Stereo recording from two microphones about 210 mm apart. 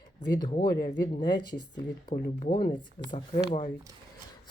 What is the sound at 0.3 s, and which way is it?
Speech, 20° left (ahead or behind).